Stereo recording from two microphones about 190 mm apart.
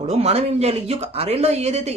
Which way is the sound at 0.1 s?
35° right (ahead or behind).